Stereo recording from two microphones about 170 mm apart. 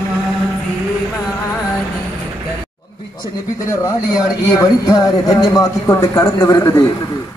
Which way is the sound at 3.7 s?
20° left (ahead or behind).